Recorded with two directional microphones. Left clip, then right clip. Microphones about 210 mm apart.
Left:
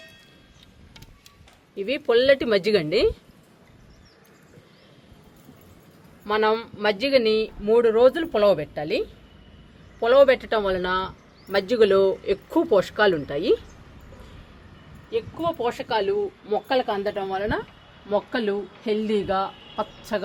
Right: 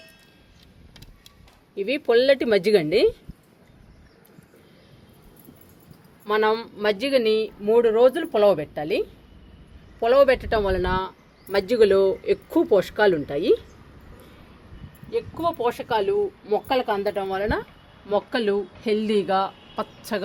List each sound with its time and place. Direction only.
1.7 s speech: 15° right (ahead or behind)
6.2 s speech: 20° right (ahead or behind)
15.1 s a woman's voice: 25° right (ahead or behind)